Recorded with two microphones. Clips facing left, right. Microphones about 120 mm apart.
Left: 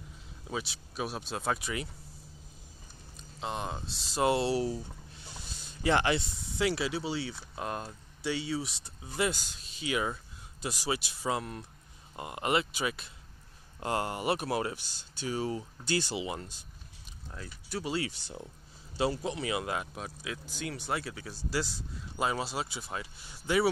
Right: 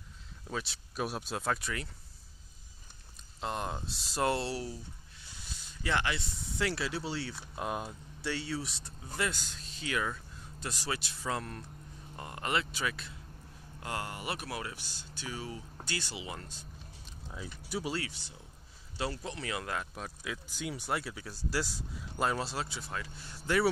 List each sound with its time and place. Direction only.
0.5 s speech: 5° left (ahead or behind)
3.3 s speech: centre (ahead or behind)
4.2 s speech: 10° left (ahead or behind)
5.8 s speech: 30° left (ahead or behind)
6.6 s speech: 10° left (ahead or behind)
9.1 s speech: 15° left (ahead or behind)
13.7 s speech: 30° left (ahead or behind)
17.6 s speech: 10° right (ahead or behind)
18.9 s speech: 15° left (ahead or behind)
20.0 s speech: centre (ahead or behind)